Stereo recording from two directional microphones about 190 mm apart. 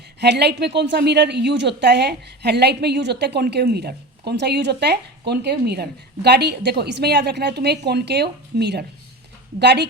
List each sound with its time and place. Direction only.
0.2 s speech: 60° right (ahead or behind)